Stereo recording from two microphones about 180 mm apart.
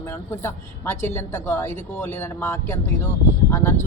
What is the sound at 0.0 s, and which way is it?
A woman's voice, 15° left (ahead or behind).